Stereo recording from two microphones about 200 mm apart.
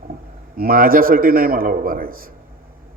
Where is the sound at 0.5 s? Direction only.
45° right (ahead or behind).